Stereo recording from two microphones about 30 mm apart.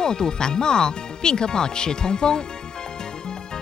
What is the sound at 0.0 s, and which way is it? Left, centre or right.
Speech, left.